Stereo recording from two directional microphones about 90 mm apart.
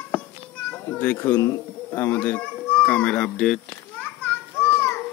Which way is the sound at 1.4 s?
35° left (ahead or behind).